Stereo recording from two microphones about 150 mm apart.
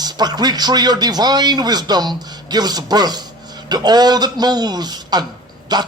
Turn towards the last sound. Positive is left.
turn(degrees=-25)  # may be behind; listen again after turning